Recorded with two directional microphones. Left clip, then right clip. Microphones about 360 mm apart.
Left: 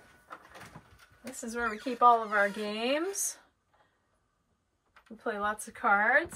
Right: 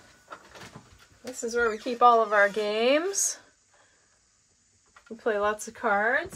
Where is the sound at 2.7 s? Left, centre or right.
Right.